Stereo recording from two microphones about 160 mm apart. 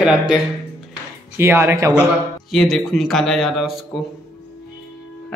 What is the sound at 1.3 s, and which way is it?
Speech, 15° right (ahead or behind).